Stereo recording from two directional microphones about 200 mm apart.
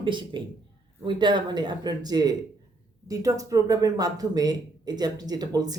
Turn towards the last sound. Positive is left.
turn(degrees=-20)  # may be behind; listen again after turning